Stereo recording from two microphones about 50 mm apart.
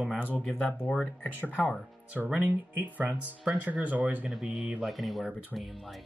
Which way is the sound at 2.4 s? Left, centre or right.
Right.